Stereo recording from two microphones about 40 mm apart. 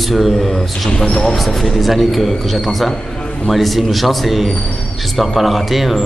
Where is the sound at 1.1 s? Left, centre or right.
Centre.